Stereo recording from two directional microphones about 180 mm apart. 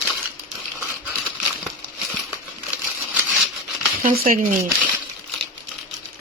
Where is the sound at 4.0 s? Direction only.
50° right (ahead or behind).